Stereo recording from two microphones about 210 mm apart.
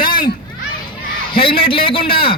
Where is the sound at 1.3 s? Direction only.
25° left (ahead or behind).